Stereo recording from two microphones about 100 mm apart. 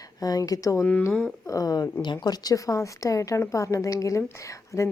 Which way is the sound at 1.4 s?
35° left (ahead or behind).